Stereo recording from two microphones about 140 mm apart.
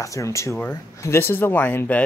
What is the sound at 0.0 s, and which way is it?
Speech, 20° left (ahead or behind).